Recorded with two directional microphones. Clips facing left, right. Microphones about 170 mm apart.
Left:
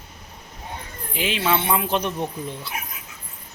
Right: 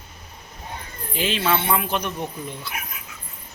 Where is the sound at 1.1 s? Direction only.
15° left (ahead or behind).